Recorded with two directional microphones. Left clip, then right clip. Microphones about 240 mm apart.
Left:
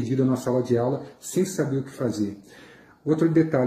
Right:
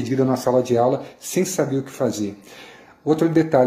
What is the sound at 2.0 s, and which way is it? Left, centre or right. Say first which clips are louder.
Speech: right 6 dB; centre.